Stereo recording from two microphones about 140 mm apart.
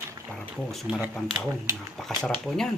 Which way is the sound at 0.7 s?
Centre (ahead or behind).